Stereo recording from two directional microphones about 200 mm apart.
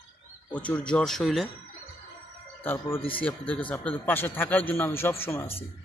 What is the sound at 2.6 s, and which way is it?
A man's voice, 10° left (ahead or behind).